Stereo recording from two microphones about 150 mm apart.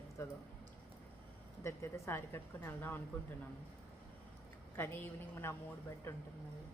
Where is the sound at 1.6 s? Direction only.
20° left (ahead or behind).